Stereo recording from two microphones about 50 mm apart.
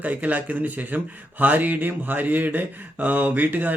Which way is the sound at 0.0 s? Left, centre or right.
Right.